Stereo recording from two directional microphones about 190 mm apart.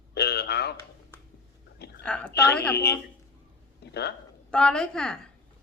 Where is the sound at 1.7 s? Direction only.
60° left (ahead or behind).